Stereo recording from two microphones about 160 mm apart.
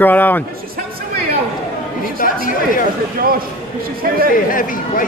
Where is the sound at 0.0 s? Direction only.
10° left (ahead or behind).